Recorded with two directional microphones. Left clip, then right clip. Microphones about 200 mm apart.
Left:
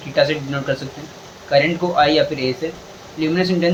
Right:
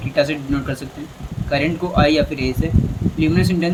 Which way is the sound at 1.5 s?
40° right (ahead or behind).